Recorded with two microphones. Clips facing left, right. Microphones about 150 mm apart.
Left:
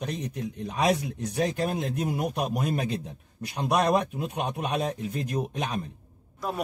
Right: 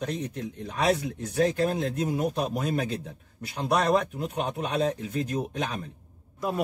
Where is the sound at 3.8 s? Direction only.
15° left (ahead or behind).